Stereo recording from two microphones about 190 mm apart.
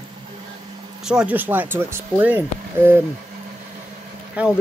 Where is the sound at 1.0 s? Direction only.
5° right (ahead or behind).